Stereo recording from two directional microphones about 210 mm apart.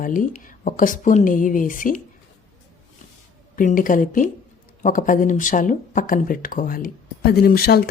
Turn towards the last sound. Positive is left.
turn(degrees=45)  # may be behind; listen again after turning